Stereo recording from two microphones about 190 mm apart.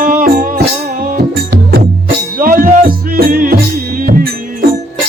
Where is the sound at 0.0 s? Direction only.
45° right (ahead or behind).